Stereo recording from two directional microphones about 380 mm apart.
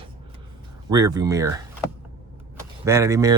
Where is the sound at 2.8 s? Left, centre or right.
Centre.